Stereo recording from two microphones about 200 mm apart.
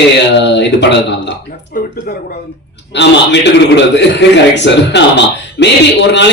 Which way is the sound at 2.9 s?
60° left (ahead or behind).